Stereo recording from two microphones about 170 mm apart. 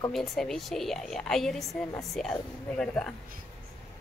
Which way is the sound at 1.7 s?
20° left (ahead or behind).